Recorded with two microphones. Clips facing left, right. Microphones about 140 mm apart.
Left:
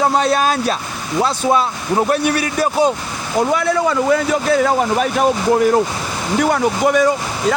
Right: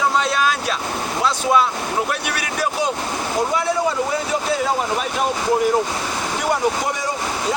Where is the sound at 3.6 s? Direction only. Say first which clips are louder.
Left 3 dB; 65° left (ahead or behind).